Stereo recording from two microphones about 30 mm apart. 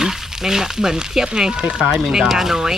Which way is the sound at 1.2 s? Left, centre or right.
Right.